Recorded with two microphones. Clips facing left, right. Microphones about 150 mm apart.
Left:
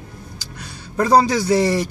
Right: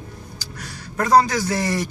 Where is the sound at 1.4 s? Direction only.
25° left (ahead or behind).